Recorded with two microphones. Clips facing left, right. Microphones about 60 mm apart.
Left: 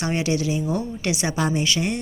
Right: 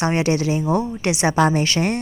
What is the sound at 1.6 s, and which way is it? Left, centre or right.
Speech, right.